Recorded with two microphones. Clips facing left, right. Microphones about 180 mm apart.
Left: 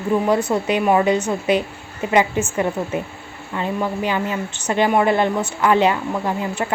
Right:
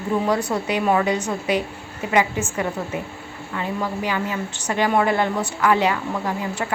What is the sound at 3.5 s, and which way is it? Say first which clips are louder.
A woman's voice: left 3 dB; 25° left (ahead or behind).